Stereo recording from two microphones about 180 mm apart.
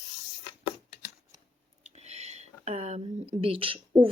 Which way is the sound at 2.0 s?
40° right (ahead or behind).